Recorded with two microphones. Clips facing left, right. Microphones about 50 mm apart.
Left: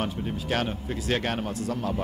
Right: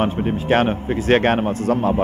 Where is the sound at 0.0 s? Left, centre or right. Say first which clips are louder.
Right 10 dB; right.